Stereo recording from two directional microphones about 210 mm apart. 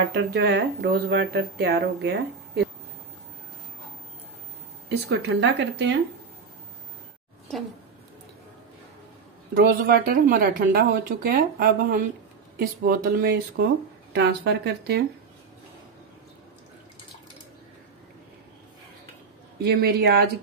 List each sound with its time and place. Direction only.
0.1 s speech: 50° right (ahead or behind)
4.8 s speech: 55° right (ahead or behind)
9.5 s speech: 40° right (ahead or behind)
19.6 s speech: 50° right (ahead or behind)